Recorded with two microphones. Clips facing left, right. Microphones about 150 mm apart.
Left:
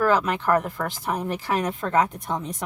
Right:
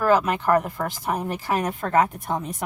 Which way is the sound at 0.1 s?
5° right (ahead or behind).